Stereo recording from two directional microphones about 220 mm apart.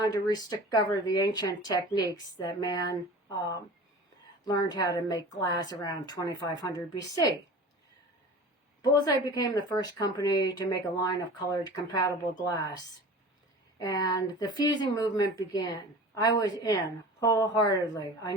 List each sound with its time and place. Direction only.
0.0 s speech: 15° left (ahead or behind)
8.8 s speech: 15° left (ahead or behind)